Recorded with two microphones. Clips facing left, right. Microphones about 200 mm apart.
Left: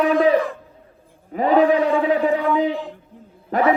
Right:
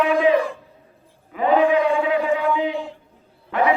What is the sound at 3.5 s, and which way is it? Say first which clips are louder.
Dog: left 1 dB; 40° left (ahead or behind).